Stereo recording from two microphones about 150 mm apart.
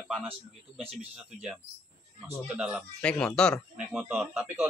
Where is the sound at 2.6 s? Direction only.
5° right (ahead or behind).